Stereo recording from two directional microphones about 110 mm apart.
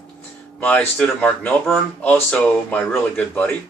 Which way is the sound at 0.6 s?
15° left (ahead or behind).